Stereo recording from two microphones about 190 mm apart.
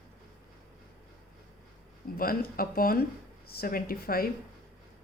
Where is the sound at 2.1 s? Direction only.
50° left (ahead or behind).